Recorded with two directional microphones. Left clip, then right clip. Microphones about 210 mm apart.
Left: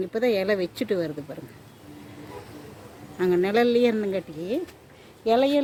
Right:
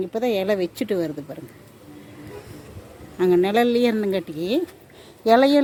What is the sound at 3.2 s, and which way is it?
Speech, 15° right (ahead or behind).